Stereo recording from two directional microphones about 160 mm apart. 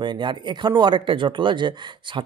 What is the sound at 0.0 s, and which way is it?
Speech, 30° right (ahead or behind).